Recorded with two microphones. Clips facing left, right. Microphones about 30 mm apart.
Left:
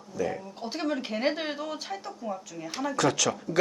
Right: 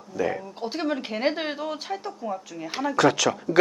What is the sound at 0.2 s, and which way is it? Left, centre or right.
Speech, right.